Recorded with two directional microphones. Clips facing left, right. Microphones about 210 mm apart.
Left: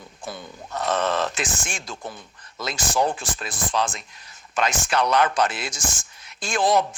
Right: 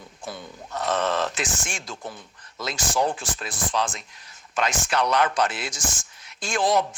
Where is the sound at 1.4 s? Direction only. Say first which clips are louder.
Left 1 dB; 50° left (ahead or behind).